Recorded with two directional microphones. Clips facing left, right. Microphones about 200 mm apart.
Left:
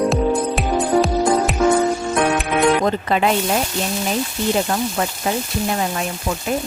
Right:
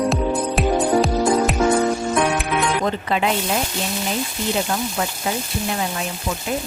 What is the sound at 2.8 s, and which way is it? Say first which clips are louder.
Music: left 3 dB; 45° left (ahead or behind).